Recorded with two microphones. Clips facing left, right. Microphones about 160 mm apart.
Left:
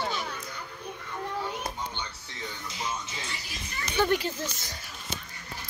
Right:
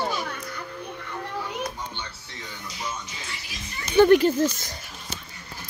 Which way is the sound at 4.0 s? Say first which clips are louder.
Right 11 dB; 65° right (ahead or behind).